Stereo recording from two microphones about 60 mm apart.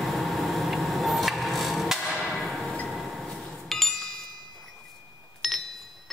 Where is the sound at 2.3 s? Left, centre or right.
Centre.